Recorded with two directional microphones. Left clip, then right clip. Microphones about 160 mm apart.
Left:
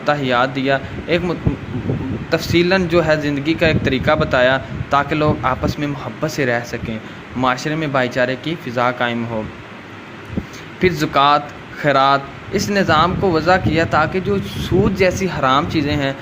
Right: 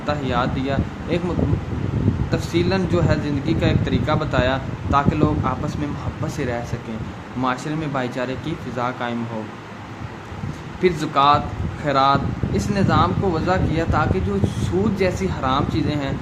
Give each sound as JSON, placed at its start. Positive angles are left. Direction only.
{"t": 0.0, "sound": "a man's voice", "side_deg": 30}
{"t": 2.3, "sound": "a man's voice", "side_deg": 30}
{"t": 10.8, "sound": "a man's voice", "side_deg": 25}